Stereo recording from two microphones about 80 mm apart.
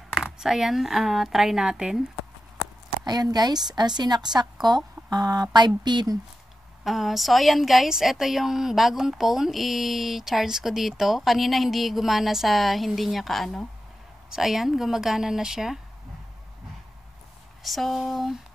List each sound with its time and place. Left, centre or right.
0.1 s a woman's voice: centre
3.1 s a woman's voice: right
6.8 s a woman's voice: centre
17.6 s a woman's voice: centre